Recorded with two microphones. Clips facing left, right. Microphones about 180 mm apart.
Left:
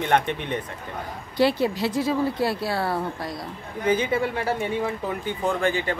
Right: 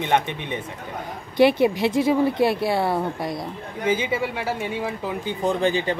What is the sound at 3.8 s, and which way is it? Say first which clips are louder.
Speech: left 1 dB; 10° right (ahead or behind).